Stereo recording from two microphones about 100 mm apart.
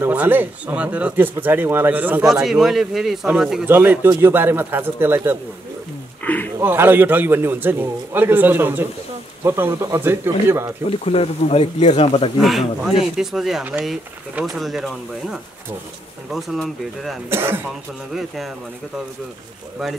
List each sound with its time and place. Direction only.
0.0 s a man's voice: 15° right (ahead or behind)
2.4 s speech: 5° right (ahead or behind)
3.6 s a man's voice: 20° right (ahead or behind)
6.2 s speech: 15° left (ahead or behind)
6.6 s a man's voice: 20° right (ahead or behind)
10.9 s speech: 90° left
12.4 s speech: centre (ahead or behind)
17.3 s a man's voice: 25° right (ahead or behind)
18.1 s speech: centre (ahead or behind)